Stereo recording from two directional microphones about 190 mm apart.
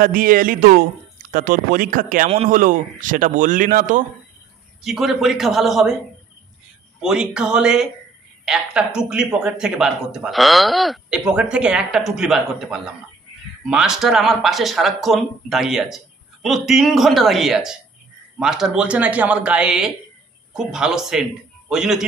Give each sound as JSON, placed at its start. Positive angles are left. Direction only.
{"t": 0.0, "sound": "speech", "side_deg": -50}
{"t": 4.8, "sound": "speech", "side_deg": 0}
{"t": 7.0, "sound": "a man's voice", "side_deg": -5}